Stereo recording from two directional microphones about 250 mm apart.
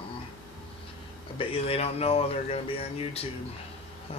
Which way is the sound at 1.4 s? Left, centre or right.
Left.